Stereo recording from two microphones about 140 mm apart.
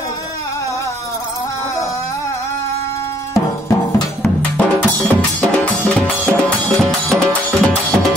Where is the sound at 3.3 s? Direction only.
20° left (ahead or behind).